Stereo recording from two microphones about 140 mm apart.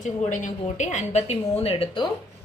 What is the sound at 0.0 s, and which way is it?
A woman's voice, 60° left (ahead or behind).